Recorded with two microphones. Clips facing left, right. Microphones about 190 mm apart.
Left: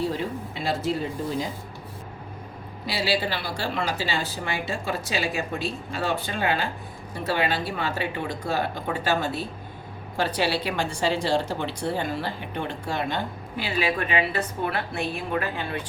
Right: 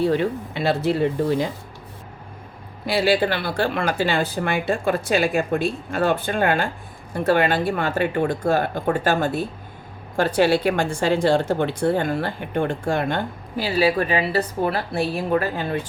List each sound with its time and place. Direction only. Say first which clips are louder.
0.0 s speech: right 7 dB; 65° right (ahead or behind)
2.8 s a woman's voice: right 7 dB; 55° right (ahead or behind)